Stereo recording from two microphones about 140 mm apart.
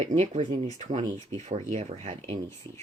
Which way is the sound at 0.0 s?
50° right (ahead or behind).